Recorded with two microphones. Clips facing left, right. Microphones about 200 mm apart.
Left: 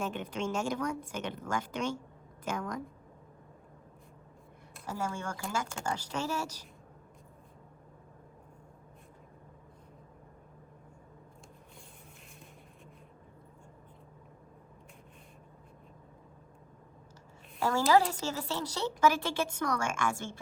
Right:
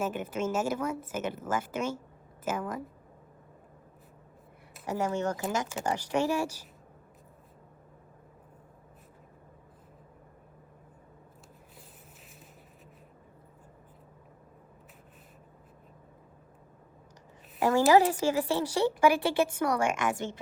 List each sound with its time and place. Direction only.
0.0 s a woman's voice: 5° right (ahead or behind)
4.9 s a woman's voice: 20° right (ahead or behind)
17.6 s a woman's voice: 20° right (ahead or behind)